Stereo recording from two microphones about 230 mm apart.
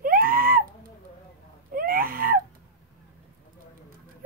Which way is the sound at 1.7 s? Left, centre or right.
Right.